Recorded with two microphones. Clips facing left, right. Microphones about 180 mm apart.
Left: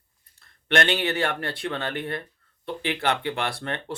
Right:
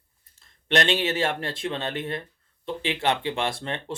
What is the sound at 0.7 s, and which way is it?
Speech, 20° right (ahead or behind).